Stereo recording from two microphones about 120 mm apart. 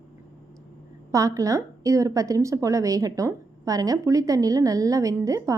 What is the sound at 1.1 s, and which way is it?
A woman's voice, 25° right (ahead or behind).